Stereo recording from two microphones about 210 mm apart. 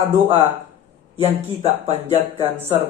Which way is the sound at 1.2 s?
30° right (ahead or behind).